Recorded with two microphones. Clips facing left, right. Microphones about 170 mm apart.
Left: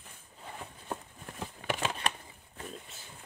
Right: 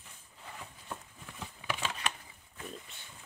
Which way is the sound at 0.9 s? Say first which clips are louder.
Left 6 dB; 45° left (ahead or behind).